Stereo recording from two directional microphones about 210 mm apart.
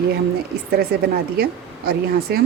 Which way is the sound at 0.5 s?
50° right (ahead or behind).